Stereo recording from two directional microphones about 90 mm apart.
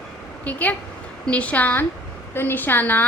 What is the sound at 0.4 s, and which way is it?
A woman's voice, 15° left (ahead or behind).